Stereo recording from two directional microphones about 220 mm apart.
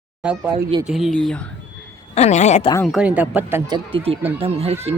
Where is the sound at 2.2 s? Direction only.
30° left (ahead or behind).